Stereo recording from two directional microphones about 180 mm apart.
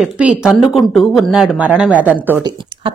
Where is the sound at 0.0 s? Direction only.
5° right (ahead or behind).